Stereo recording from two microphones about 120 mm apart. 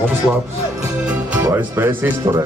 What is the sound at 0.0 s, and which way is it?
Speech, 20° right (ahead or behind).